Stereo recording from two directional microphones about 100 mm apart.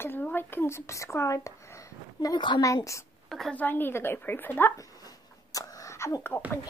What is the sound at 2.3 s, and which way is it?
Speech, 50° left (ahead or behind).